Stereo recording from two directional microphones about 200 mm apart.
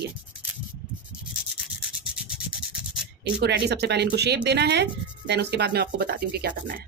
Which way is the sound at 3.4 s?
55° right (ahead or behind).